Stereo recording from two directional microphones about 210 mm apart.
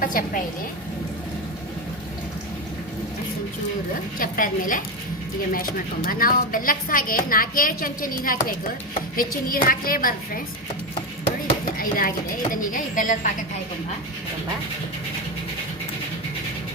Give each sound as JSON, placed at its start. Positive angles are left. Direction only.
{"t": 0.0, "sound": "a woman's voice", "side_deg": 40}
{"t": 4.2, "sound": "a woman's voice", "side_deg": 40}
{"t": 11.6, "sound": "speech", "side_deg": 40}